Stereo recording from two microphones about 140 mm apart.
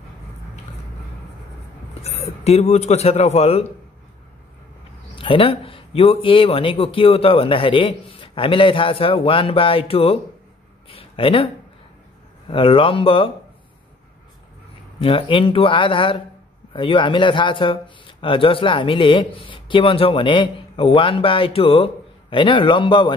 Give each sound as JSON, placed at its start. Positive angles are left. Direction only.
{"t": 2.0, "sound": "a man's voice", "side_deg": 50}
{"t": 5.1, "sound": "speech", "side_deg": 40}
{"t": 15.0, "sound": "speech", "side_deg": 40}